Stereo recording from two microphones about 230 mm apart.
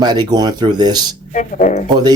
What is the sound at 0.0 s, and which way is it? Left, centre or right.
Speech, centre.